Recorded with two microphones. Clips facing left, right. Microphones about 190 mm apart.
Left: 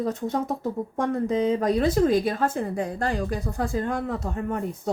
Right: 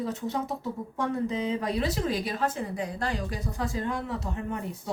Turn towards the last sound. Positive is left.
turn(degrees=50)  # may be behind; listen again after turning